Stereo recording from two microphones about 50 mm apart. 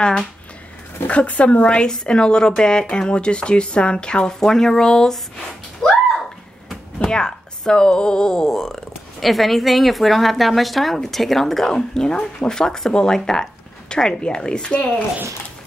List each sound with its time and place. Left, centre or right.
1.0 s a woman's voice: left; by 5.2 s centre
5.8 s a sound: centre
7.1 s speech: centre